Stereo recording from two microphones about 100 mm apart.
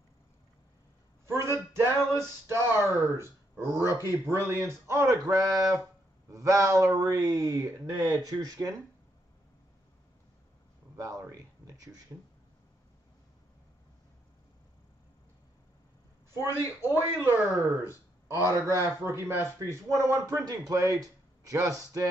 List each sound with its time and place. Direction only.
1.2 s a sound: 25° right (ahead or behind)
1.8 s speech: 25° right (ahead or behind)
11.0 s speech: 30° right (ahead or behind)
16.5 s speech: 30° left (ahead or behind)
17.2 s speech: 25° right (ahead or behind)